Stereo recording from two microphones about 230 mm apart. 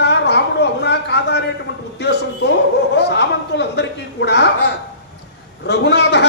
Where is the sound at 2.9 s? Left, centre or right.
Left.